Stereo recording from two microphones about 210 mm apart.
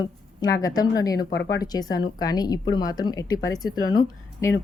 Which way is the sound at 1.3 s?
50° left (ahead or behind).